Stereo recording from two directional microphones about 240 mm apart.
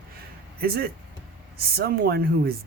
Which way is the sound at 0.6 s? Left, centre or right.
Right.